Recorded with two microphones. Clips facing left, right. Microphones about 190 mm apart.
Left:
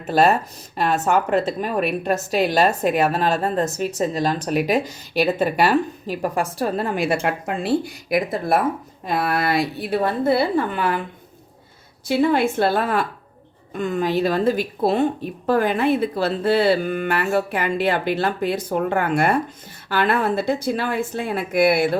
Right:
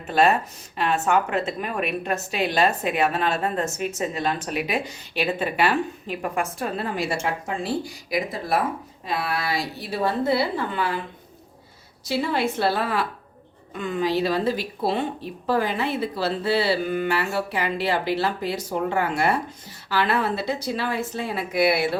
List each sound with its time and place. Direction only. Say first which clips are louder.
0.1 s a woman's voice: left 3 dB; 40° left (ahead or behind)
12.0 s a woman's voice: left 6 dB; 55° left (ahead or behind)